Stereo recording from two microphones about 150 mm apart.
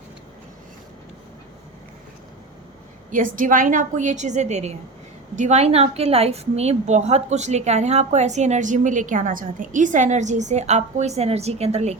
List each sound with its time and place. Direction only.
3.1 s a woman's voice: 60° right (ahead or behind); by 11.9 s 45° right (ahead or behind)